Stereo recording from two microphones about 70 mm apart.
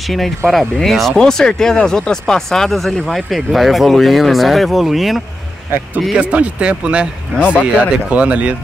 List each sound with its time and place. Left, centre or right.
0.0 s speech: centre
6.1 s speech: centre